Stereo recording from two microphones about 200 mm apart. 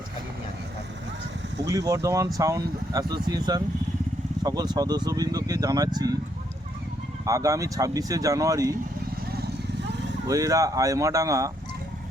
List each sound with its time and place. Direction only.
1.6 s speech: 15° right (ahead or behind)
7.3 s speech: 15° right (ahead or behind)
10.2 s speech: 15° right (ahead or behind)